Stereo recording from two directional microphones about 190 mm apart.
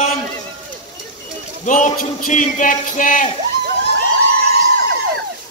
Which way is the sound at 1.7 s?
40° left (ahead or behind).